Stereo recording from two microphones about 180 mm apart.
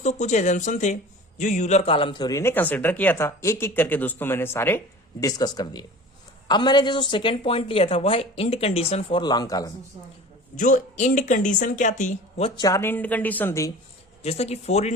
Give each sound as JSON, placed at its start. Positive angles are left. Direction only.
{"t": 0.0, "sound": "a woman's voice", "side_deg": 40}
{"t": 10.6, "sound": "speech", "side_deg": 45}
{"t": 12.5, "sound": "a man's voice", "side_deg": 20}
{"t": 14.2, "sound": "a woman's voice", "side_deg": 35}